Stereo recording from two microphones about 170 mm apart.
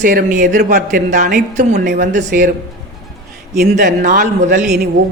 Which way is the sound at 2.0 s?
50° right (ahead or behind).